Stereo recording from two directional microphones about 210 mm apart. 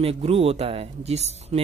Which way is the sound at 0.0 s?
30° right (ahead or behind).